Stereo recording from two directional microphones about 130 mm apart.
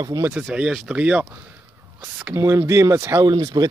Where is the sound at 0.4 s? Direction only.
5° right (ahead or behind).